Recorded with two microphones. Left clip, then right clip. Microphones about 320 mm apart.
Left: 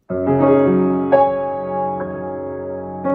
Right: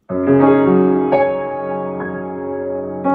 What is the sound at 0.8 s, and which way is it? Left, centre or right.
Music, centre.